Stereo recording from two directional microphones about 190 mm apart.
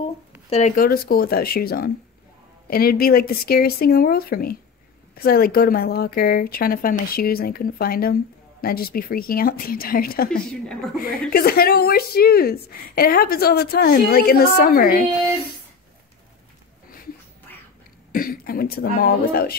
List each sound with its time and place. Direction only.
0.5 s speech: 35° left (ahead or behind)
0.8 s a woman's voice: 50° left (ahead or behind)
11.3 s a woman's voice: 50° left (ahead or behind)
17.5 s duck: 10° left (ahead or behind)
18.1 s speech: 50° left (ahead or behind)